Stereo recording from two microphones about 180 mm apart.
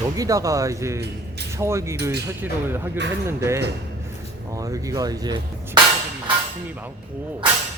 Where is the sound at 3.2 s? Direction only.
15° right (ahead or behind).